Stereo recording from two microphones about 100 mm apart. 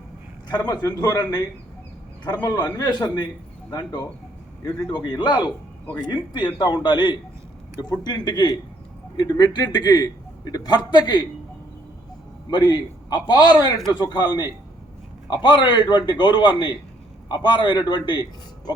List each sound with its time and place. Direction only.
0.4 s a man's voice: 45° left (ahead or behind)
12.5 s a man's voice: 45° left (ahead or behind)